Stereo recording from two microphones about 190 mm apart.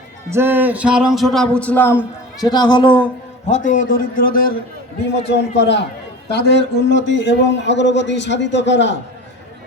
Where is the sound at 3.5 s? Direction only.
40° left (ahead or behind).